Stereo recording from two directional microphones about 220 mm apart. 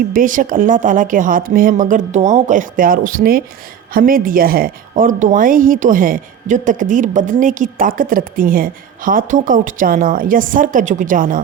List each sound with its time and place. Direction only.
0.1 s speech: 40° right (ahead or behind)